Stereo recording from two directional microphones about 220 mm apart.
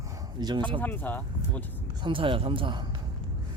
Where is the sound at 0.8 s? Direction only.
10° left (ahead or behind).